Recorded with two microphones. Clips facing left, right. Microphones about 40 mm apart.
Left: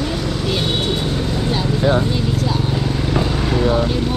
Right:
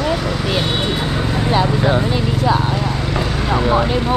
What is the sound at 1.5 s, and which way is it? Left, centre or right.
Speech, right.